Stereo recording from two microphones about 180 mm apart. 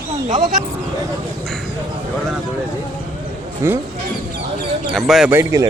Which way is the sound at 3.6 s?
15° right (ahead or behind).